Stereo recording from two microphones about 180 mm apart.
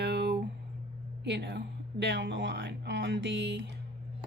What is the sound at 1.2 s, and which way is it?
Speech, 70° right (ahead or behind).